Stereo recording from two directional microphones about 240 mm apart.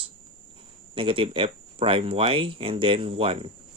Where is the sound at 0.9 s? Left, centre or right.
Right.